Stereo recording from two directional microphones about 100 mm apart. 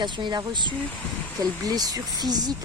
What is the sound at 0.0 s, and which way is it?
A woman's voice, 50° right (ahead or behind).